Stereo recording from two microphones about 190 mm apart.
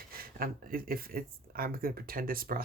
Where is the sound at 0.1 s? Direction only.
50° right (ahead or behind).